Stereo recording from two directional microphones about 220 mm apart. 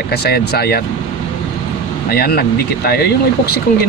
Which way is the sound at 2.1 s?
45° left (ahead or behind).